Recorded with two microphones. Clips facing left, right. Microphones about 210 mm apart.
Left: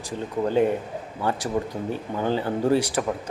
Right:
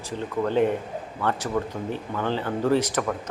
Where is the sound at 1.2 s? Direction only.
10° left (ahead or behind).